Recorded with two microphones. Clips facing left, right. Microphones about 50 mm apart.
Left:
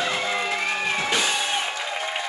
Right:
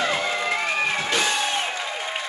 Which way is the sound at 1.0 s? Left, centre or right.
Centre.